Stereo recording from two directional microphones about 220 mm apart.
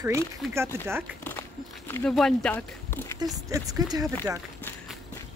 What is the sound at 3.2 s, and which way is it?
Speech, 15° right (ahead or behind).